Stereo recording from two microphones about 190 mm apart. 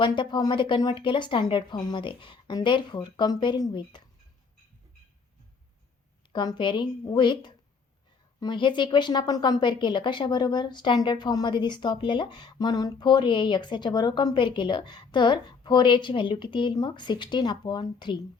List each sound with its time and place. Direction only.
0.0 s a woman's voice: 25° left (ahead or behind)
6.3 s a woman's voice: 25° left (ahead or behind)